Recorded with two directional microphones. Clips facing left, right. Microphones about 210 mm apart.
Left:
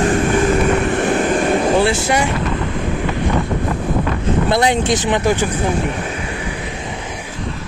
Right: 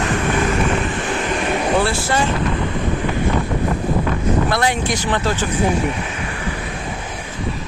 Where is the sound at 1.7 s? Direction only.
15° left (ahead or behind).